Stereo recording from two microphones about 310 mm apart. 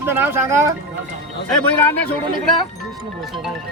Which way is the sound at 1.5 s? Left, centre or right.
Centre.